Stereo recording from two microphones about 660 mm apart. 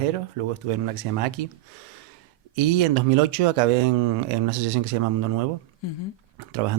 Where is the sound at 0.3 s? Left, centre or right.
Right.